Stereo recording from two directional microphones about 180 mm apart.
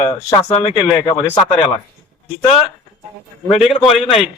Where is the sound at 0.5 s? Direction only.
30° left (ahead or behind).